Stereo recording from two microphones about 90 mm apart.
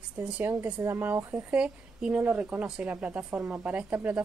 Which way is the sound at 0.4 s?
25° right (ahead or behind).